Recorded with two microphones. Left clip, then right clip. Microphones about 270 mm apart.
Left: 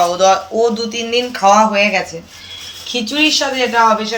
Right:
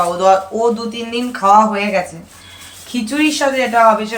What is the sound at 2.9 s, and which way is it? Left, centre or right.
Speech, centre.